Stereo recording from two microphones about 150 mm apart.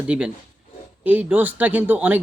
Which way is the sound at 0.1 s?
5° right (ahead or behind).